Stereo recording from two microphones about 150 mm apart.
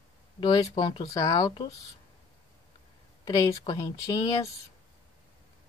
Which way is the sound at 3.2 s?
30° left (ahead or behind).